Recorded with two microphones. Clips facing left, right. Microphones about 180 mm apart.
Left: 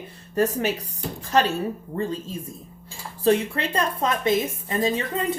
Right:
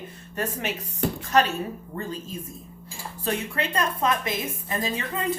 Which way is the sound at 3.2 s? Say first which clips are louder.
Left 7 dB; 35° left (ahead or behind).